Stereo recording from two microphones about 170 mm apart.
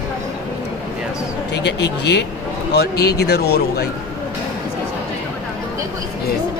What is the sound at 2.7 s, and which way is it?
Speech, 70° left (ahead or behind).